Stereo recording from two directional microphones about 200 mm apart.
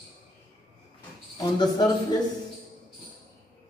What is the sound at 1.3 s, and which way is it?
Speech, 20° left (ahead or behind).